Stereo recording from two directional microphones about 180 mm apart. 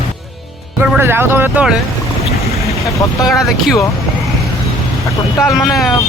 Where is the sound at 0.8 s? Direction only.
10° right (ahead or behind).